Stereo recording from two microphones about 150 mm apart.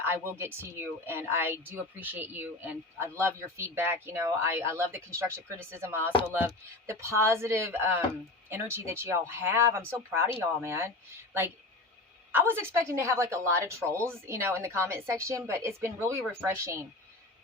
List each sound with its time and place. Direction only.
0.0 s speech: 15° right (ahead or behind)
12.3 s speech: 15° right (ahead or behind)